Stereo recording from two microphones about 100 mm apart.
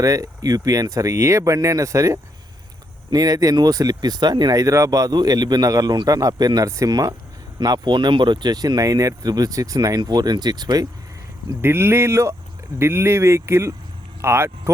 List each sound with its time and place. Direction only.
0.0 s speech: 35° right (ahead or behind)
11.6 s speech: 25° right (ahead or behind)